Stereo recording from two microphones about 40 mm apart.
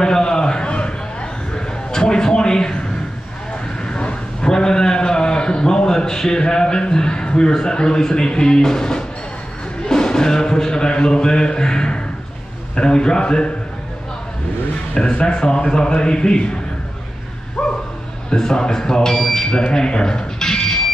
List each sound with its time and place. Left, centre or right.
0.0 s a sound: centre
3.8 s a sound: left
9.8 s music: centre
12.7 s a man's voice: left
15.2 s a man's voice: centre
17.6 s bow-wow: left
18.3 s speech: centre